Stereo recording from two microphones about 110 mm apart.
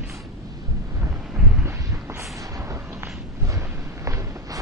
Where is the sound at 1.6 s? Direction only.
25° right (ahead or behind).